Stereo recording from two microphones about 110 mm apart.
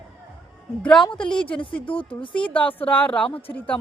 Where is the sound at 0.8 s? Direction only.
10° left (ahead or behind).